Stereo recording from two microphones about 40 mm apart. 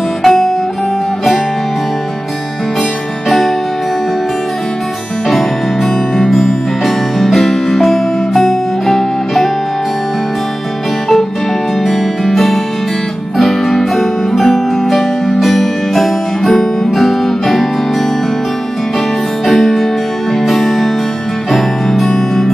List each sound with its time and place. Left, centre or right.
0.2 s guitar: centre
3.3 s music: centre
5.3 s music: centre
11.8 s music: centre
19.4 s music: centre